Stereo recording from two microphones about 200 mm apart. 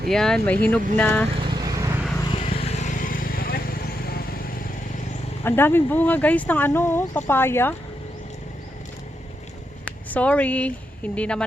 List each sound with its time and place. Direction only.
0.1 s speech: 5° left (ahead or behind)
1.5 s vehicle: 20° right (ahead or behind)
2.3 s vehicle: 30° left (ahead or behind); by 4.5 s 50° left (ahead or behind)
5.4 s speech: 10° left (ahead or behind)
9.8 s speech: 5° left (ahead or behind)